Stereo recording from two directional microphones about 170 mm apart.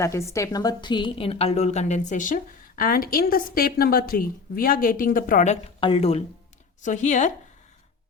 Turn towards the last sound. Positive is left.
turn(degrees=45)  # may be behind; listen again after turning